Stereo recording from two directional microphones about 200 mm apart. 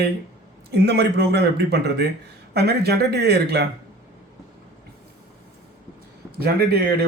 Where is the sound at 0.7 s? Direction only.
55° right (ahead or behind).